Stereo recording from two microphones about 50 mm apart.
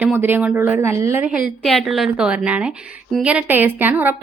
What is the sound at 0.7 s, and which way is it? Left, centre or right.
Speech, right.